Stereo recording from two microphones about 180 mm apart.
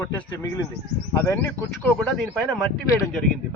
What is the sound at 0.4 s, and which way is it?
Speech, 20° left (ahead or behind).